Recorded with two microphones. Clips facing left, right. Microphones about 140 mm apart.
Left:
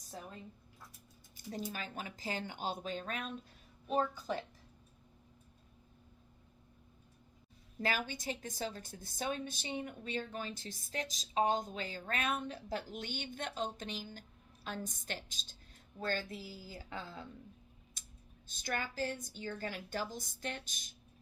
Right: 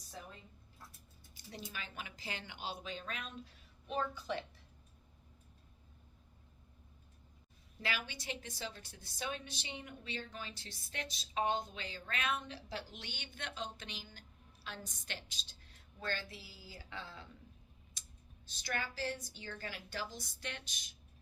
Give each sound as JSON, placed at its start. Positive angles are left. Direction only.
{"t": 1.5, "sound": "a woman's voice", "side_deg": 45}
{"t": 7.8, "sound": "a woman's voice", "side_deg": 45}
{"t": 18.6, "sound": "a woman's voice", "side_deg": 45}